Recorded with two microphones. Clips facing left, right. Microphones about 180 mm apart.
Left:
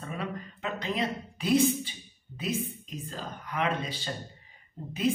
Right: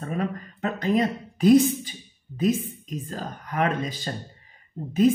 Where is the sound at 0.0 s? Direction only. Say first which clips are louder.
Right 7 dB; 45° right (ahead or behind).